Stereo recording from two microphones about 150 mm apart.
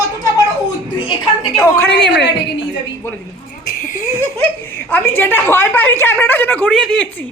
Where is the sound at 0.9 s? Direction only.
35° left (ahead or behind).